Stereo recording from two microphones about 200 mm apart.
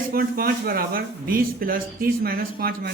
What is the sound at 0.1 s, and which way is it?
A man's voice, 50° right (ahead or behind).